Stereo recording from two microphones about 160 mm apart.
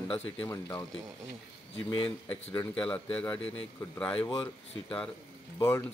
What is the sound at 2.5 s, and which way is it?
A man's voice, 10° left (ahead or behind).